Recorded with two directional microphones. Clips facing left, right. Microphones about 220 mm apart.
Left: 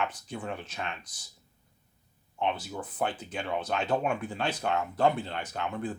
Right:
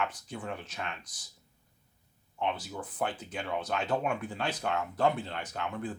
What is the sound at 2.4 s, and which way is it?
Speech, 25° left (ahead or behind).